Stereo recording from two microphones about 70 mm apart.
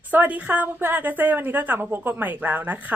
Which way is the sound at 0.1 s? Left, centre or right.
Right.